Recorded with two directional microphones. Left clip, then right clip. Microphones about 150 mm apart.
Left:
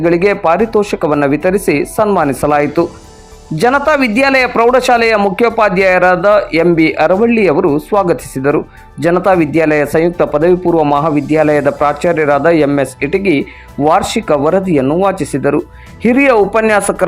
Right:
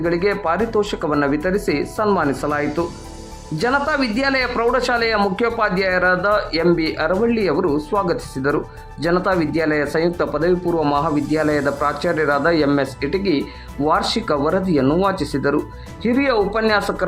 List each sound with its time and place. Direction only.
0.0 s a man's voice: 25° left (ahead or behind)